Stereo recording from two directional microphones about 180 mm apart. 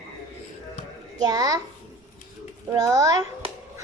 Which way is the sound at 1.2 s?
20° right (ahead or behind).